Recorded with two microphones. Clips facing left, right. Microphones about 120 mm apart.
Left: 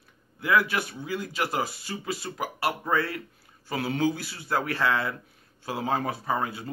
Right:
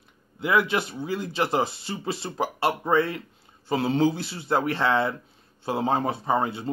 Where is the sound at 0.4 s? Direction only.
20° right (ahead or behind).